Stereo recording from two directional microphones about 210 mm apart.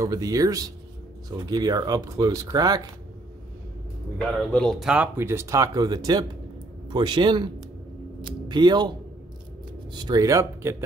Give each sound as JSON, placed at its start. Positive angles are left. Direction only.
{"t": 0.0, "sound": "speech", "side_deg": -15}
{"t": 4.5, "sound": "speech", "side_deg": 5}
{"t": 9.9, "sound": "speech", "side_deg": -20}